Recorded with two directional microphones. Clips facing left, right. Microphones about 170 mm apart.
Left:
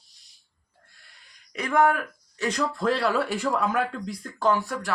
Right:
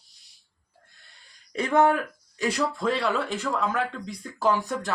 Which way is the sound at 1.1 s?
25° right (ahead or behind).